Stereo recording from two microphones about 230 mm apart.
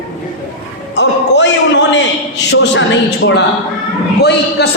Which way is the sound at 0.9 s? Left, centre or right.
Left.